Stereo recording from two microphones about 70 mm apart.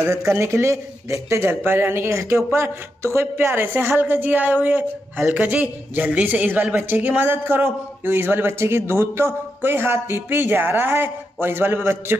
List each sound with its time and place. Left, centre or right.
0.0 s speech: right